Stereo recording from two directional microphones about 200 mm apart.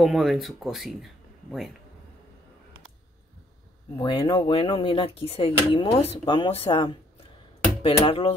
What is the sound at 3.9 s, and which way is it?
Speech, 20° left (ahead or behind).